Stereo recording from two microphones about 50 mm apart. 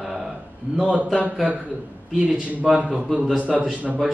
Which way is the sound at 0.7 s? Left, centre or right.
Right.